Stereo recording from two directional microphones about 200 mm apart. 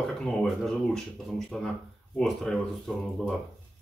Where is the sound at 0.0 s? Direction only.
5° left (ahead or behind).